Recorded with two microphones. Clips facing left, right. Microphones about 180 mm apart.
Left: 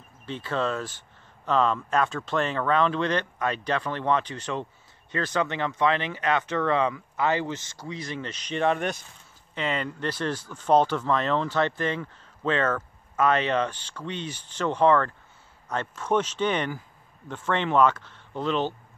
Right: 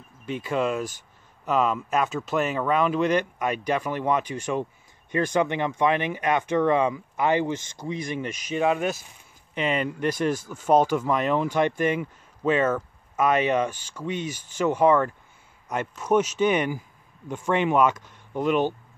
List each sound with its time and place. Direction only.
0.3 s speech: 10° right (ahead or behind)